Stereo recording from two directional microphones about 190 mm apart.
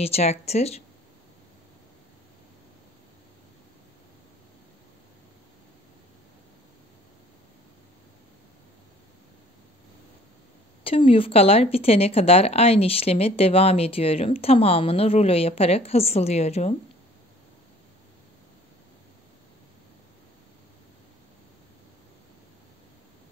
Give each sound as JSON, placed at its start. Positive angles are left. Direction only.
{"t": 0.0, "sound": "speech", "side_deg": 35}
{"t": 10.8, "sound": "speech", "side_deg": 30}